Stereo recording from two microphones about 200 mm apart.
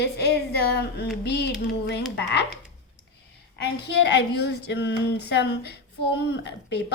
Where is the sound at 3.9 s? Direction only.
55° left (ahead or behind).